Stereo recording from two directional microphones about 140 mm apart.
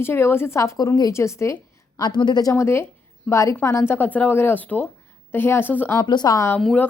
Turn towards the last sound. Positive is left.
turn(degrees=5)  # may be behind; listen again after turning